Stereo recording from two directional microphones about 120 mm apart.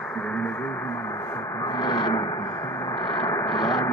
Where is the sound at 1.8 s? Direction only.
35° left (ahead or behind).